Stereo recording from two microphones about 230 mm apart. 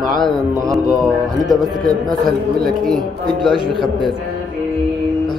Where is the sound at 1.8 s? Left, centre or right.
Centre.